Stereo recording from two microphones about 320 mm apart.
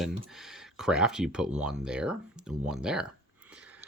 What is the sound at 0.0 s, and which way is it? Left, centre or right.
Speech, centre.